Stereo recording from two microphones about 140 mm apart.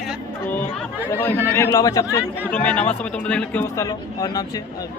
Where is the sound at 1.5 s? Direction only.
15° left (ahead or behind).